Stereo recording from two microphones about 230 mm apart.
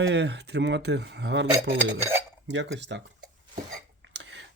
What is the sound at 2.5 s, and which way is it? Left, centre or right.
Speech, right.